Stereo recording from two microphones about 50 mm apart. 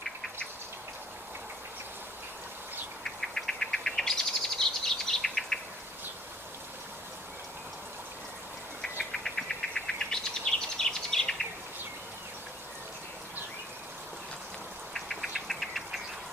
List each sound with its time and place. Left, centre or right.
3.0 s bird: centre
9.1 s bird: centre
15.0 s engine knocking: centre